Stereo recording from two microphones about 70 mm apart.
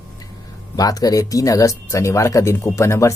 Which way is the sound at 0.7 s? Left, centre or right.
Left.